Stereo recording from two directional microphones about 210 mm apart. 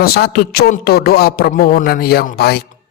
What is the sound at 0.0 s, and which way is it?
Speech, 45° left (ahead or behind).